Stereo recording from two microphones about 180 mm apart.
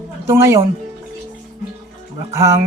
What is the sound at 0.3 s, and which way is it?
Speech, 15° right (ahead or behind).